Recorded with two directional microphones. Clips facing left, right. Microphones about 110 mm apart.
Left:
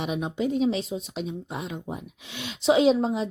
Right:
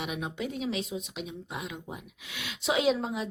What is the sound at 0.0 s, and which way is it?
Speech, 30° left (ahead or behind).